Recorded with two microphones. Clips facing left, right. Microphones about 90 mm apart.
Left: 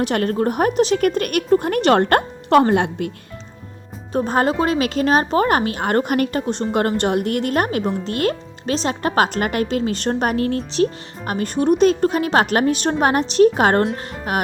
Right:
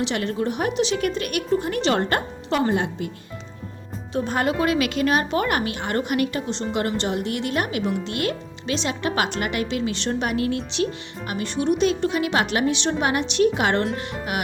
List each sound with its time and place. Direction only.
0.0 s a woman's voice: 45° left (ahead or behind); by 3.1 s 60° left (ahead or behind)
4.1 s a woman's voice: 40° left (ahead or behind)